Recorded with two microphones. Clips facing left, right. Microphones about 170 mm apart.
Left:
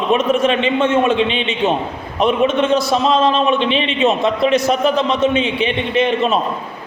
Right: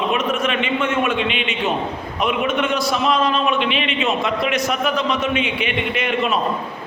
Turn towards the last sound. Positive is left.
turn(degrees=30)  # may be behind; listen again after turning